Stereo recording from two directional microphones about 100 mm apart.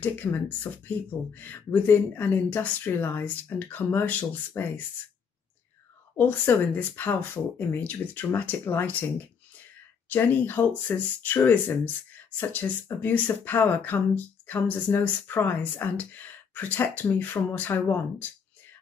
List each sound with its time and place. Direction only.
0.0 s speech: 20° left (ahead or behind)
6.1 s speech: 20° left (ahead or behind)
10.0 s speech: 20° left (ahead or behind)